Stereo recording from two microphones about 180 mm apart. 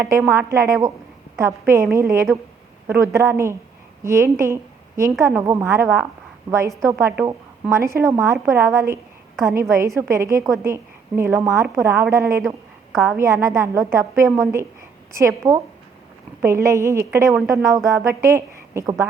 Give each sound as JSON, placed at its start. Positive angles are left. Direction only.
{"t": 0.0, "sound": "a woman's voice", "side_deg": -15}